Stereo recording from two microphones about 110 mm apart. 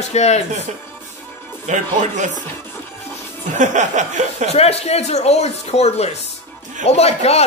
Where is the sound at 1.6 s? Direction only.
90° right.